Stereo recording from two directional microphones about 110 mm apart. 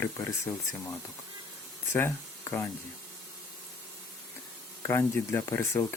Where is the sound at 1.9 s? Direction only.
20° left (ahead or behind).